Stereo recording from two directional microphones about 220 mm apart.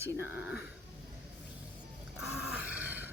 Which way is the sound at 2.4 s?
5° right (ahead or behind).